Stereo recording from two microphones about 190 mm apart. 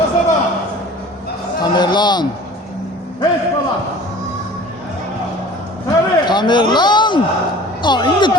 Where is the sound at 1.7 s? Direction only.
25° left (ahead or behind).